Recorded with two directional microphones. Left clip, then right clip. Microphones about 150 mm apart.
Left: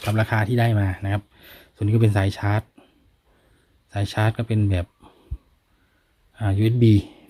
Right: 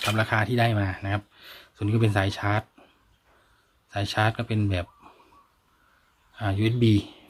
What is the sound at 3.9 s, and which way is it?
Speech, 40° left (ahead or behind).